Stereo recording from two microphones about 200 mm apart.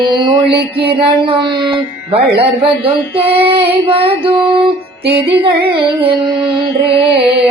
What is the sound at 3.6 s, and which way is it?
Music, 25° right (ahead or behind).